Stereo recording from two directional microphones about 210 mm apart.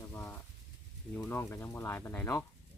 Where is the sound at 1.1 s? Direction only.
10° left (ahead or behind).